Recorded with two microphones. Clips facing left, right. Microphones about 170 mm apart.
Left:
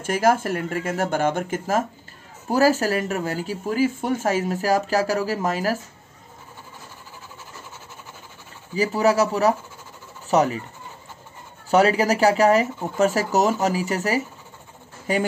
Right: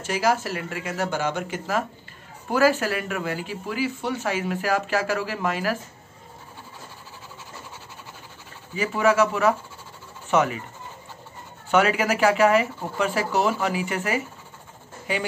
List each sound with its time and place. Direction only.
0.0 s speech: 50° left (ahead or behind)
8.7 s speech: 35° left (ahead or behind)
11.7 s speech: 35° left (ahead or behind)